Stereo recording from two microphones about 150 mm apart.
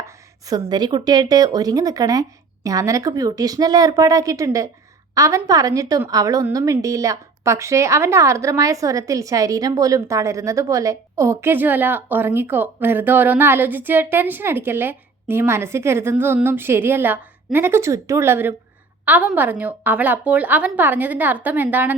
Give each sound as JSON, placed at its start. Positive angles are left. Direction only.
{"t": 0.0, "sound": "a woman's voice", "side_deg": -25}